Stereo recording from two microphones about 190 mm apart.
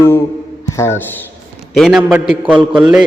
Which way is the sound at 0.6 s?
15° left (ahead or behind).